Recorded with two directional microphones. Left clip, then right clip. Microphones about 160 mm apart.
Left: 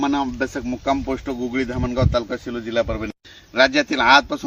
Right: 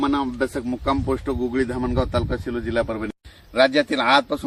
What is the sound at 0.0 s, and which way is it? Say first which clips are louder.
Speech: left 1 dB; 55° left (ahead or behind).